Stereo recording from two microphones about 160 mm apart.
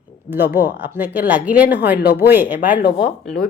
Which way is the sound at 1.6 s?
90° left.